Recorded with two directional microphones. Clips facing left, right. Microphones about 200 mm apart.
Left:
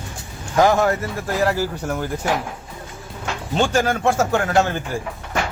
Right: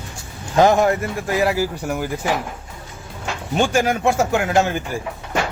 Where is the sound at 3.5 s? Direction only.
10° right (ahead or behind).